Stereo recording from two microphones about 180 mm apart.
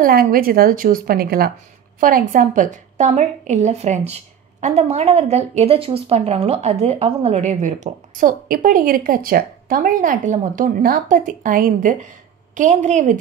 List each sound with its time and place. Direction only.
0.0 s a woman's voice: 55° right (ahead or behind)